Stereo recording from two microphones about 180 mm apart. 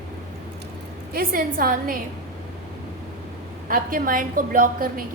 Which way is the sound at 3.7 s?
50° right (ahead or behind).